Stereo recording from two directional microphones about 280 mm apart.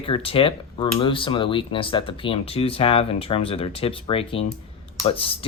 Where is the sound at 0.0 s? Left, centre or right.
Centre.